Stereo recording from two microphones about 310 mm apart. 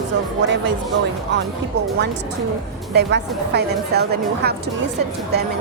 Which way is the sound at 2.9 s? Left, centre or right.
Right.